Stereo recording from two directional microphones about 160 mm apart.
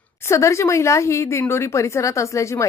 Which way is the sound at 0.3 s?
20° left (ahead or behind).